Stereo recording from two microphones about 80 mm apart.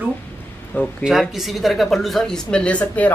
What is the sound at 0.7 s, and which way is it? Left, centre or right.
Speech, left.